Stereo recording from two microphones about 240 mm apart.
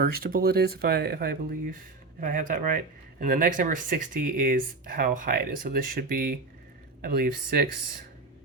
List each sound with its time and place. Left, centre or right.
0.0 s speech: right